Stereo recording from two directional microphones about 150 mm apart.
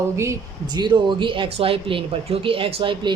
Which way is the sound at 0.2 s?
25° right (ahead or behind).